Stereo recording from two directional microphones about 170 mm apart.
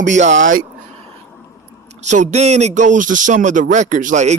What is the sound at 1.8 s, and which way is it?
Speech, 45° right (ahead or behind).